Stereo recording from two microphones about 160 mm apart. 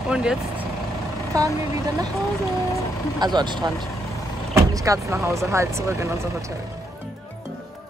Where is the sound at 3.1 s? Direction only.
25° right (ahead or behind).